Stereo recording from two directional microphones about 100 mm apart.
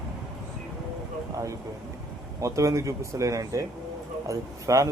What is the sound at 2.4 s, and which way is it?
Speech, 30° right (ahead or behind).